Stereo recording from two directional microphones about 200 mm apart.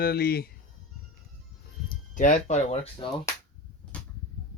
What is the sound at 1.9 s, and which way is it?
Speech, 40° left (ahead or behind).